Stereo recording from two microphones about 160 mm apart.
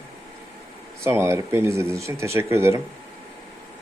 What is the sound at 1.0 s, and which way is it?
Speech, 15° right (ahead or behind).